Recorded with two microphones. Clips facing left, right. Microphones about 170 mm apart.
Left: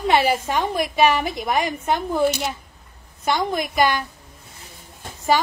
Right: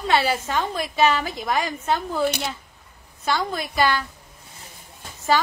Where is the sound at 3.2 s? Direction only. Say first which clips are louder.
Left 3 dB; 15° left (ahead or behind).